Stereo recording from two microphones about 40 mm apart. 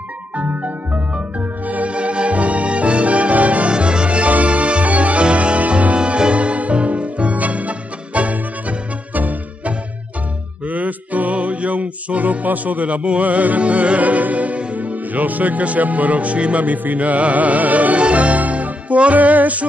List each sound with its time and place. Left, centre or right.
0.4 s music: right
3.7 s music: right
5.9 s music: right